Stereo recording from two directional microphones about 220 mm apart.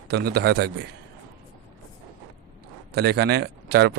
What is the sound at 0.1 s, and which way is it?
Speech, 45° right (ahead or behind).